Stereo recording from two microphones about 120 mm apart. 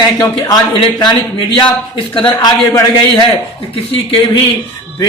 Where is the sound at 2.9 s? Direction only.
40° left (ahead or behind).